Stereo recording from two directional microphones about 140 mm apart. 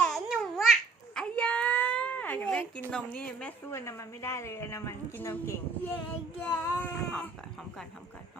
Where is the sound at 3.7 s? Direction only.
20° left (ahead or behind).